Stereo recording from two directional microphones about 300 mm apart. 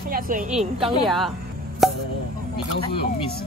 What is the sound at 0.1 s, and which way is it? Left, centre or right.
Speech, right.